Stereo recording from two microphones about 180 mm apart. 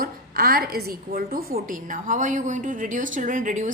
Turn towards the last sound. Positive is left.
turn(degrees=-45)  # may be behind; listen again after turning